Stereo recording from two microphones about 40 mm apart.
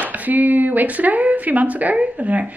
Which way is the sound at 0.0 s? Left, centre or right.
Right.